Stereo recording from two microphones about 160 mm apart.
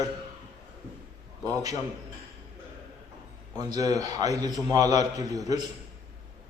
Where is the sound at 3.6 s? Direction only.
25° right (ahead or behind).